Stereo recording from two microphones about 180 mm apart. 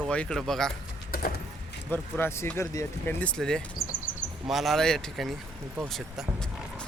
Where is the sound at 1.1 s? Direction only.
55° left (ahead or behind).